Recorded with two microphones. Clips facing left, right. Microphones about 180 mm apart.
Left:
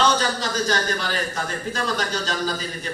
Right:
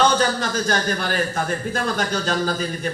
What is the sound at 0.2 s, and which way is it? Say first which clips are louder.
A man's voice: right 3 dB; 50° right (ahead or behind).